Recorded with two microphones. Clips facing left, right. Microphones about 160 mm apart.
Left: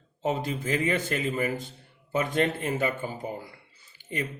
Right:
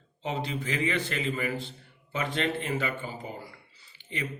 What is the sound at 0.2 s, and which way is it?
A man's voice, 45° left (ahead or behind).